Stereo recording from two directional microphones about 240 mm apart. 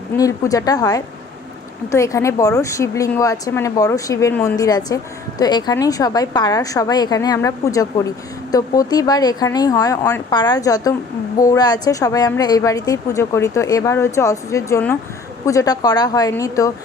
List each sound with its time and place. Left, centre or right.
0.2 s a woman's voice: centre